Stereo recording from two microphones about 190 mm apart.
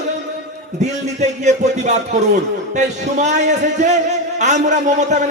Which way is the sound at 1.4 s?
35° right (ahead or behind).